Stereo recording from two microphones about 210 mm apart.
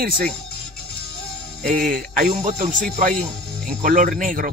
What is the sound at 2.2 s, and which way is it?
Speech, 35° right (ahead or behind).